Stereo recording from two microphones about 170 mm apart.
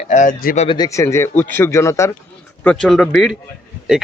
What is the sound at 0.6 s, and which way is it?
Speech, 25° left (ahead or behind).